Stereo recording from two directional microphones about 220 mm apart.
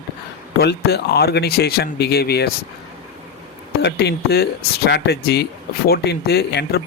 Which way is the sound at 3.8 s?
50° left (ahead or behind).